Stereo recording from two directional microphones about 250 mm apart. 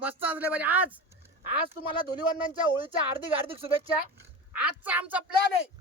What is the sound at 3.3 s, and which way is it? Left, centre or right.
Speech, right.